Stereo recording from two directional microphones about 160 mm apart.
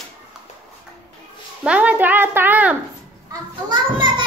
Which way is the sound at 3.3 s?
25° right (ahead or behind).